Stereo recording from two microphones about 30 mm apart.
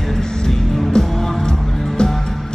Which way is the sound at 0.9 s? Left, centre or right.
Left.